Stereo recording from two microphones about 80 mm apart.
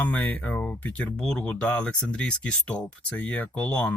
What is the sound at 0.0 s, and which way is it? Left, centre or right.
Speech, left.